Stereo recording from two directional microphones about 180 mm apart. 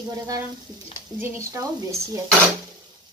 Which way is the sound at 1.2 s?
15° right (ahead or behind).